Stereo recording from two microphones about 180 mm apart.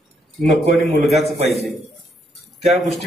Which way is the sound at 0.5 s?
Centre (ahead or behind).